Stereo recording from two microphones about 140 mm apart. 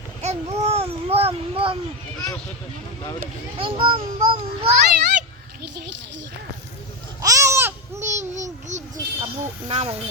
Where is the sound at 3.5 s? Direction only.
40° right (ahead or behind).